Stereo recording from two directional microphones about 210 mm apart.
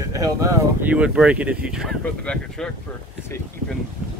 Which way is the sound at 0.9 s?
5° right (ahead or behind).